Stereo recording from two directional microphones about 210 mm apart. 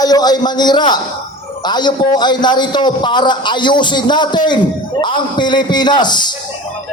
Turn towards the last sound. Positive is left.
turn(degrees=20)  # may be behind; listen again after turning